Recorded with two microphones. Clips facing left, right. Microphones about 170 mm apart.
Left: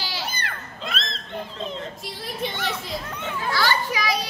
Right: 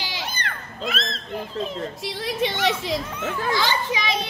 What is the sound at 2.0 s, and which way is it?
Speech, 85° right.